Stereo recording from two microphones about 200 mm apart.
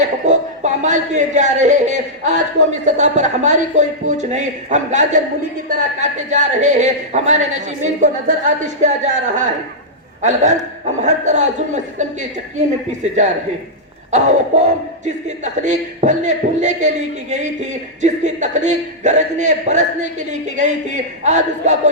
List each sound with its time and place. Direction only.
0.3 s a man's voice: 35° right (ahead or behind)